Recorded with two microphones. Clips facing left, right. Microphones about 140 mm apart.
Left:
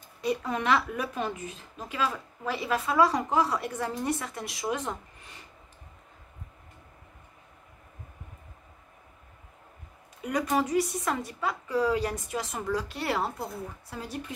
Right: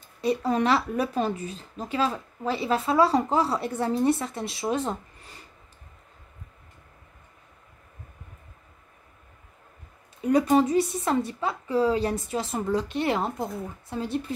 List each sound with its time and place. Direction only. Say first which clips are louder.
0.2 s a woman's voice: right 5 dB; 30° right (ahead or behind)
10.2 s a woman's voice: right 7 dB; 30° right (ahead or behind)